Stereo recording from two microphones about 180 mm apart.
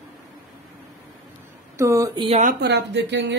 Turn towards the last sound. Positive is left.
turn(degrees=-75)  # may be behind; listen again after turning